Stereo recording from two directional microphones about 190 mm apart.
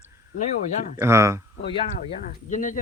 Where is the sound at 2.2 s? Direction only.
40° left (ahead or behind).